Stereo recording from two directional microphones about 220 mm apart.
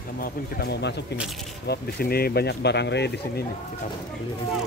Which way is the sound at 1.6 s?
45° left (ahead or behind).